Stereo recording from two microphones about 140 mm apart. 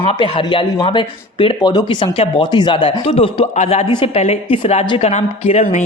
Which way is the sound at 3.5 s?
50° left (ahead or behind).